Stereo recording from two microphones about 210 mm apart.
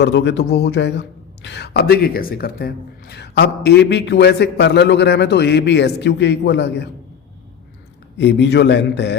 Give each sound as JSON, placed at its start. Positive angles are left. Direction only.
{"t": 0.0, "sound": "speech", "side_deg": 55}
{"t": 8.2, "sound": "a man's voice", "side_deg": 55}